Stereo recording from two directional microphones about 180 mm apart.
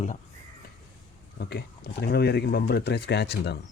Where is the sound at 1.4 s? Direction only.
65° left (ahead or behind).